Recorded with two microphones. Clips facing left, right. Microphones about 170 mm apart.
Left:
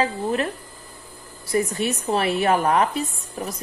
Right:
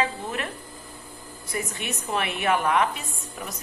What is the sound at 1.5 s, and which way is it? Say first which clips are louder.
Speech: left 9 dB; 35° left (ahead or behind).